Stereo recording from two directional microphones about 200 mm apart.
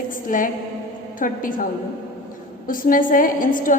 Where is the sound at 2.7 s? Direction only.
45° left (ahead or behind).